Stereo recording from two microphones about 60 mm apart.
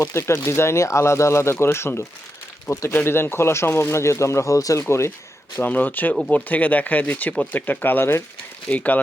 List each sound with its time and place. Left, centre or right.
0.1 s speech: left
4.8 s speech: left
5.5 s speech: left